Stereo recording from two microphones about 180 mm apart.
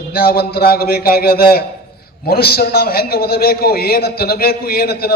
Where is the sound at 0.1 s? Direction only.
55° left (ahead or behind).